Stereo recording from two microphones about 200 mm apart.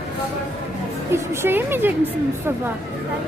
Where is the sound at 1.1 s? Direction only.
10° right (ahead or behind).